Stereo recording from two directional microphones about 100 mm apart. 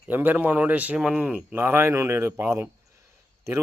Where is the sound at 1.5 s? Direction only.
20° right (ahead or behind).